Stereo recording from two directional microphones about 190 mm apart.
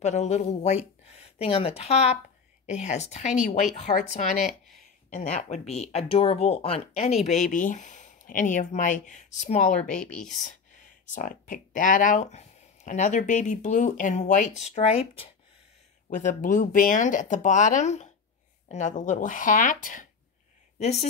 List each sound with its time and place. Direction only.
0.0 s speech: 35° left (ahead or behind)
10.0 s speech: 5° left (ahead or behind)
10.4 s speech: 40° left (ahead or behind)
16.2 s speech: 40° left (ahead or behind)